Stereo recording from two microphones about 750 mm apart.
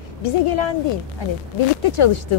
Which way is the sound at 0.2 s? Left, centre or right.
Left.